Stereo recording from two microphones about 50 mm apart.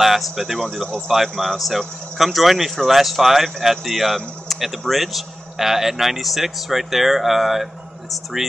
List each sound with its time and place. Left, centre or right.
0.0 s speech: centre